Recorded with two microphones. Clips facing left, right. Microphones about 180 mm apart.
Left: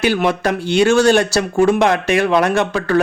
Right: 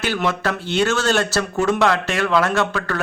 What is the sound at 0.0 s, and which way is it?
Speech, 15° left (ahead or behind).